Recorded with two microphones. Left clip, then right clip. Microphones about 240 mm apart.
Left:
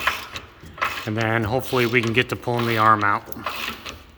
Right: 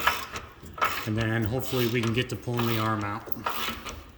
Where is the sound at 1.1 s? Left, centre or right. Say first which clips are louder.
Left 7 dB; centre.